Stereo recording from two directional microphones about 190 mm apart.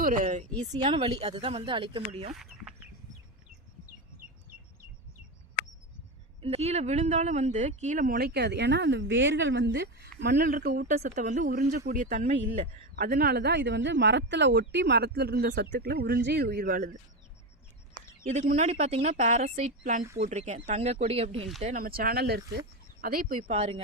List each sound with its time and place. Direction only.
0.0 s speech: 45° right (ahead or behind)
0.7 s speech: 25° right (ahead or behind)
2.3 s speech: centre (ahead or behind)
6.4 s speech: 30° right (ahead or behind)
18.2 s speech: 35° right (ahead or behind)
21.6 s speech: 45° right (ahead or behind)
23.4 s speech: 35° right (ahead or behind)